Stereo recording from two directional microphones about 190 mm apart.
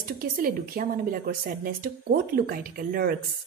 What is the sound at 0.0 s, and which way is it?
Speech, 50° right (ahead or behind).